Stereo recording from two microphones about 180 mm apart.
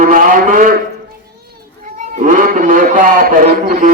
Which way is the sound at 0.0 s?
50° right (ahead or behind).